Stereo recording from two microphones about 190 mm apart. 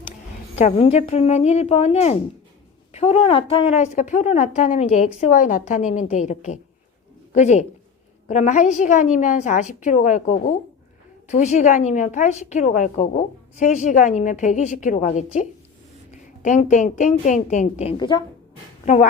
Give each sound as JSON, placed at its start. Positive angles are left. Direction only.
{"t": 0.6, "sound": "a woman's voice", "side_deg": 35}
{"t": 17.9, "sound": "a woman's voice", "side_deg": 25}